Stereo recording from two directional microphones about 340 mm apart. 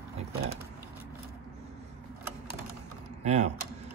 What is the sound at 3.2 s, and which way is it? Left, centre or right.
Speech, centre.